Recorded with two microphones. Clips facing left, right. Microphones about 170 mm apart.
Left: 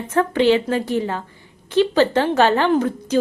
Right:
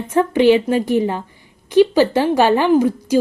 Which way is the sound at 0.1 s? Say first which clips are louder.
Right 3 dB; 15° right (ahead or behind).